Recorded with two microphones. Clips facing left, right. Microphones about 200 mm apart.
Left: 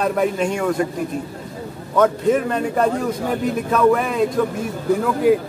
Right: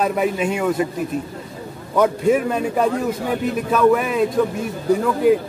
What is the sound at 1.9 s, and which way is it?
A man's voice, 10° right (ahead or behind).